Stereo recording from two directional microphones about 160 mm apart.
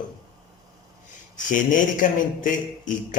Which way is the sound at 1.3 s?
55° left (ahead or behind).